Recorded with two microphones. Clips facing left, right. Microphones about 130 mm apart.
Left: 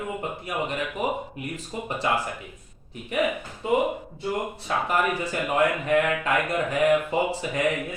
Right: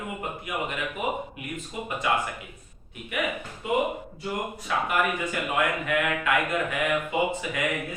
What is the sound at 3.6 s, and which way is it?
Speech, 35° left (ahead or behind).